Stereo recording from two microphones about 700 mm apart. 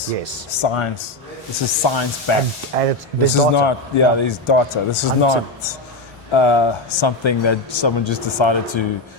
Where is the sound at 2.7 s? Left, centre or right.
Right.